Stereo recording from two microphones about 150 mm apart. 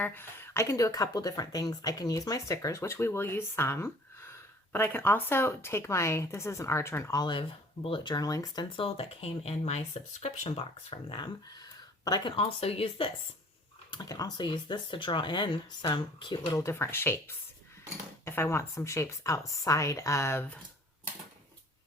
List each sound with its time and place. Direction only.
0.0 s speech: 15° left (ahead or behind)
12.4 s speech: 40° left (ahead or behind)
13.9 s speech: 25° left (ahead or behind)